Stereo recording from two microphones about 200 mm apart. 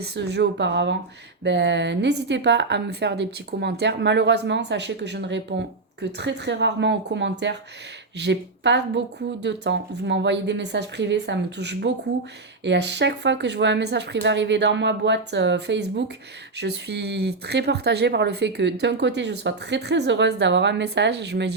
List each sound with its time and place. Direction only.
0.0 s a woman's voice: 60° right (ahead or behind)